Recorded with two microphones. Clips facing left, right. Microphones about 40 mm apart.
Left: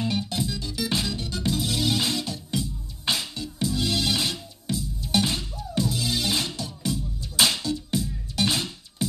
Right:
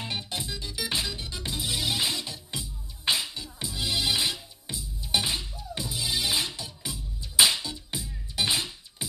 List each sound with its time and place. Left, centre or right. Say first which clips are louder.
0.0 s music: left 7 dB; right